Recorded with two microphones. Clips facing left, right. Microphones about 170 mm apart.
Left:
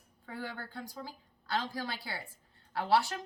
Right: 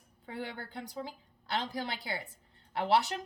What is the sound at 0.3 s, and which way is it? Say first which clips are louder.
A woman's voice: right 1 dB; 20° right (ahead or behind).